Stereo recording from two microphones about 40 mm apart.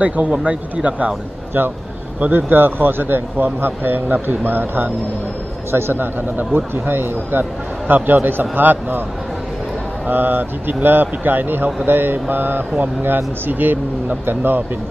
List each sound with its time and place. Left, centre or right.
0.0 s speech: right
2.3 s speech: right
5.7 s a man's voice: right
6.3 s speech: right
7.9 s speech: right
10.0 s speech: right